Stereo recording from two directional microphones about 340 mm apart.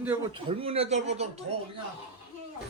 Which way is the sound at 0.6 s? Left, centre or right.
Centre.